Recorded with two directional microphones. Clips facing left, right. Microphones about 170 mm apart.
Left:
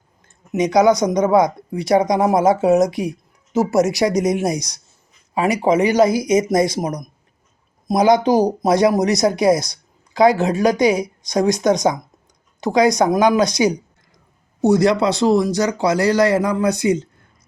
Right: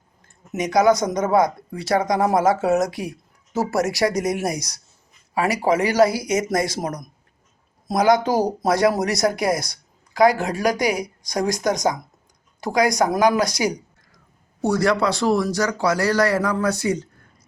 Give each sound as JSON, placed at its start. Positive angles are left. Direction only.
{"t": 0.5, "sound": "speech", "side_deg": 20}